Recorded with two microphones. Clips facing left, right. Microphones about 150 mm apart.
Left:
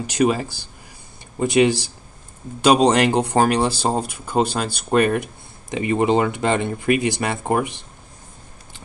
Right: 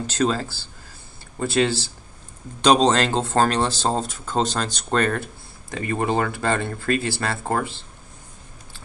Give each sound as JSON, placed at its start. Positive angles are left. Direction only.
{"t": 0.0, "sound": "speech", "side_deg": 15}